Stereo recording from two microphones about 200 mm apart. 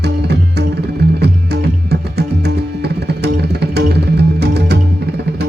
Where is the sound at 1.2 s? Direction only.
55° right (ahead or behind).